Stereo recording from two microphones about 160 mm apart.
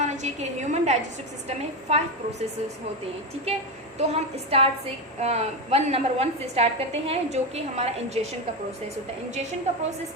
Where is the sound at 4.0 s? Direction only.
40° right (ahead or behind).